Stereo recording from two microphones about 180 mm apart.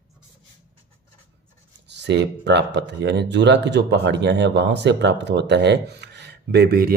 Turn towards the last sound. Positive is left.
turn(degrees=-60)  # may be behind; listen again after turning